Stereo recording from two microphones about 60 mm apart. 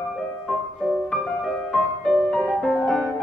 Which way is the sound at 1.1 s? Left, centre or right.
Centre.